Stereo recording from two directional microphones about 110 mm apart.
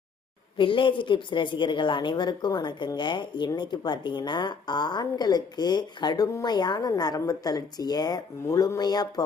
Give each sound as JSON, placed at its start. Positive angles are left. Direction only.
{"t": 0.5, "sound": "a woman's voice", "side_deg": 50}